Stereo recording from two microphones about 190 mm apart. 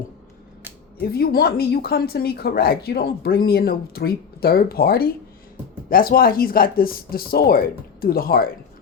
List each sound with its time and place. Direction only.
1.0 s speech: 55° left (ahead or behind)